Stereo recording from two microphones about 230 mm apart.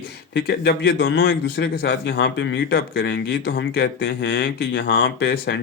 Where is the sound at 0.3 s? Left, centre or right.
Left.